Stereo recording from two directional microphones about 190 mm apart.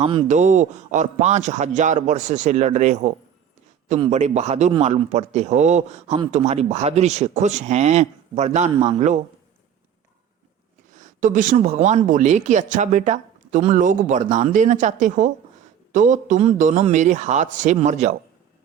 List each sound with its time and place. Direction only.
0.0 s speech: 30° right (ahead or behind)
4.1 s speech: 35° right (ahead or behind)
10.9 s speech: 40° right (ahead or behind)